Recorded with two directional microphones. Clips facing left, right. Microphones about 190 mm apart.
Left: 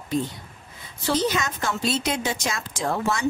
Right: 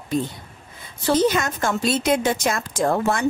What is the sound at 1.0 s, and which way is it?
A woman's voice, 50° right (ahead or behind).